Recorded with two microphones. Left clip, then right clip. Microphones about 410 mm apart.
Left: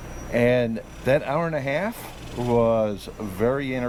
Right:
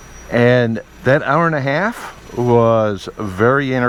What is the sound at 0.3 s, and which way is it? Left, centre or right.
Speech, right.